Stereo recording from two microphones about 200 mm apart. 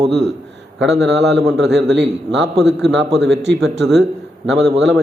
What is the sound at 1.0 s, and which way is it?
A man's voice, 60° right (ahead or behind).